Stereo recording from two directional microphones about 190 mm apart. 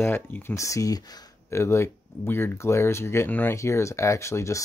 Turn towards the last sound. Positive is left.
turn(degrees=15)  # may be behind; listen again after turning